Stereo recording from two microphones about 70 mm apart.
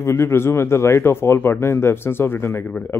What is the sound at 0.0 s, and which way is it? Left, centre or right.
Speech, left.